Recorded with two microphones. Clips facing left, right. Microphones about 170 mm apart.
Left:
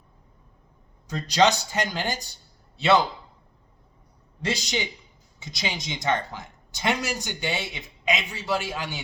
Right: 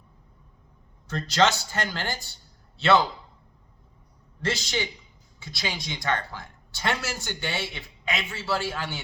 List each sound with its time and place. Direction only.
1.0 s a man's voice: 15° left (ahead or behind)
4.4 s speech: 15° left (ahead or behind)